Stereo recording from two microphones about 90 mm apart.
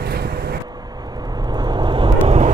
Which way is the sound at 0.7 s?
45° right (ahead or behind).